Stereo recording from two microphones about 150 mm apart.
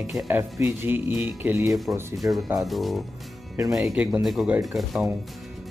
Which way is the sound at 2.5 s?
Centre (ahead or behind).